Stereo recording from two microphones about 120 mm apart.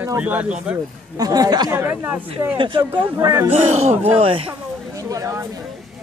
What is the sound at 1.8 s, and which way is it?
Speech, 20° right (ahead or behind).